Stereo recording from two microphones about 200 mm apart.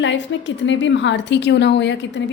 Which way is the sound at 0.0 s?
65° left (ahead or behind).